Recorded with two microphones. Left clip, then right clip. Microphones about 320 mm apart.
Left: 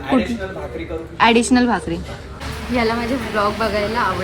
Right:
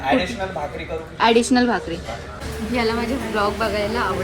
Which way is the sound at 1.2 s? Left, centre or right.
Left.